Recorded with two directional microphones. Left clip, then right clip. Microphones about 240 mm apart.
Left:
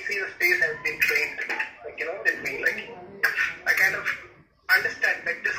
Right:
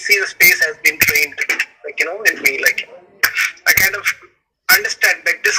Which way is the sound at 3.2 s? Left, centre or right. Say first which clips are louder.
Right 8 dB; right.